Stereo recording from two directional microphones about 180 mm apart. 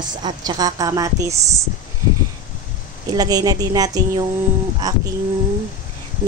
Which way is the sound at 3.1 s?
20° right (ahead or behind).